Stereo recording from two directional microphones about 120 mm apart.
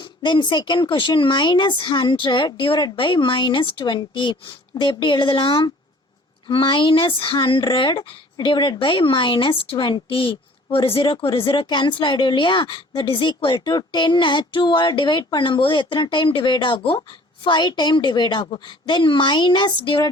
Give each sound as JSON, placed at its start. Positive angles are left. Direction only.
{"t": 0.0, "sound": "a woman's voice", "side_deg": 40}